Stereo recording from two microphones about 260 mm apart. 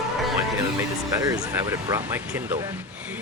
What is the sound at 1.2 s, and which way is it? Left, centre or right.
Speech, centre.